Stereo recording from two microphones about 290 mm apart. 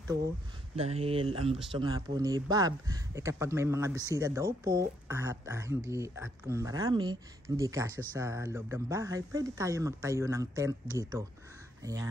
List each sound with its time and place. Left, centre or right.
0.7 s speech: right